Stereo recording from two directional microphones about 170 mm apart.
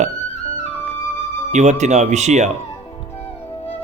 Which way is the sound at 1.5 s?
40° right (ahead or behind).